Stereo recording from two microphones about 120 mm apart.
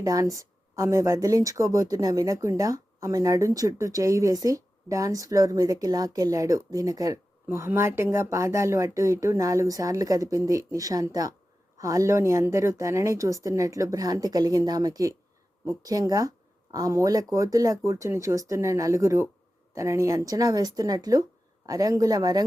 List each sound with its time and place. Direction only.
0.0 s speech: 30° right (ahead or behind)